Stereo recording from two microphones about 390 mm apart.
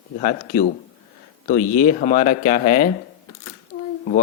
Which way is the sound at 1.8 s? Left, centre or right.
Centre.